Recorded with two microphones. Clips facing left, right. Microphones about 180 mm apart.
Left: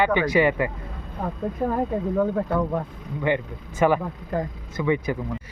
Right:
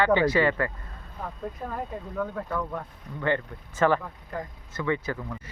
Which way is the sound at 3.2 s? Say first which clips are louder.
Left 3 dB; 15° left (ahead or behind).